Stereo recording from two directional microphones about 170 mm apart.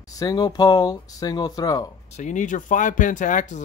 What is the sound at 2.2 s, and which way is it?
Speech, 45° left (ahead or behind).